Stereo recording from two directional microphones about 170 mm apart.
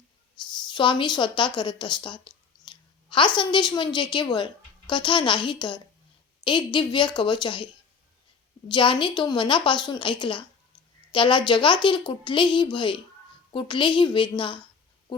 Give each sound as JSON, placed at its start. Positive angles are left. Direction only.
{"t": 0.4, "sound": "a woman's voice", "side_deg": 25}